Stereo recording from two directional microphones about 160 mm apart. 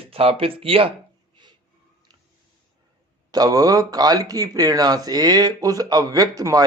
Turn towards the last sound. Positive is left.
turn(degrees=-25)  # may be behind; listen again after turning